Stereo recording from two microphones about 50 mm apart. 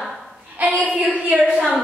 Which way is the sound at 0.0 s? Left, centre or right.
Centre.